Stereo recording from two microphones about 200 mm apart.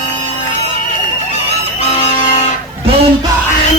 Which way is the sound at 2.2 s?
35° left (ahead or behind).